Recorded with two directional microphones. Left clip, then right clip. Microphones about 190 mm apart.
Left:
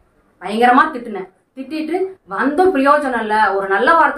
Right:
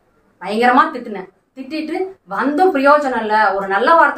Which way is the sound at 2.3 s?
5° right (ahead or behind).